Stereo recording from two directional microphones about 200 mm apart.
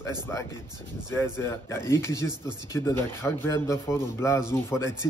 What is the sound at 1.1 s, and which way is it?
A man's voice, 15° left (ahead or behind).